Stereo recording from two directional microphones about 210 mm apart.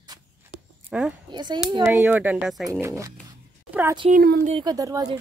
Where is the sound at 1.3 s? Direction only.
20° right (ahead or behind).